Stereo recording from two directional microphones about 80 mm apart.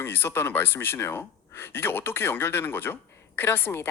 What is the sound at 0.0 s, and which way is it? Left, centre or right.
A woman's voice, left.